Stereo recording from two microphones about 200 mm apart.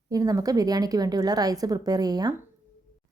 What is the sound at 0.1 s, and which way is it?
A woman's voice, 15° right (ahead or behind).